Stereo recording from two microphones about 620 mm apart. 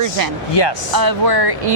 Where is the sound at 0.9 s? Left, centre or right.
Right.